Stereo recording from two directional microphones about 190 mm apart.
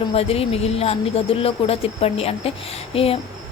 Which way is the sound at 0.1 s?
30° left (ahead or behind).